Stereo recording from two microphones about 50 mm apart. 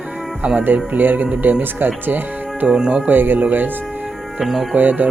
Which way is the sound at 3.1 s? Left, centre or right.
Right.